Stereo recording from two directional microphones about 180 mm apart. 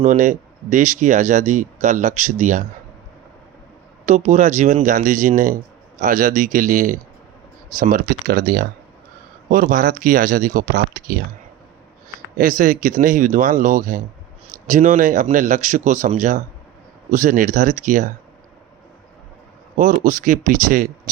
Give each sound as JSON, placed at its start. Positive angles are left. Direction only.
{"t": 0.0, "sound": "speech", "side_deg": -45}
{"t": 4.0, "sound": "speech", "side_deg": -40}
{"t": 12.4, "sound": "speech", "side_deg": -45}
{"t": 19.7, "sound": "speech", "side_deg": -45}